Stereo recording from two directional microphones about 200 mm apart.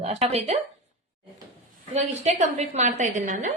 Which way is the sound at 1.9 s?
35° right (ahead or behind).